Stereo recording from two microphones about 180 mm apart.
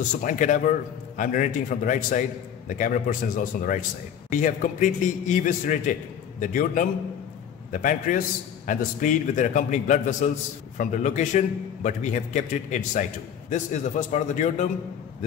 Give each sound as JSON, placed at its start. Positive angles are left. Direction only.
{"t": 0.2, "sound": "a man's voice", "side_deg": 45}